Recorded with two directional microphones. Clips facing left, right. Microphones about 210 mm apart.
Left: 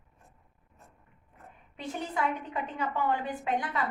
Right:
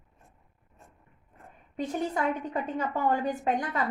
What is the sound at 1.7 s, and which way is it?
A woman's voice, 40° right (ahead or behind).